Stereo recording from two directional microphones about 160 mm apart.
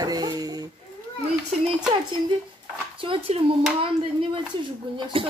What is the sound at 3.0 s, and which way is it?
Speech, 35° right (ahead or behind).